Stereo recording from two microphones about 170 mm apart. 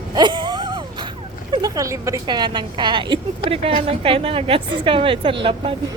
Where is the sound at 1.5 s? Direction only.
20° right (ahead or behind).